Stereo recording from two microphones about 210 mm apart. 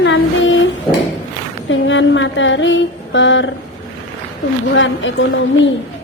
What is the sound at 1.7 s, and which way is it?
A woman's voice, 65° left (ahead or behind).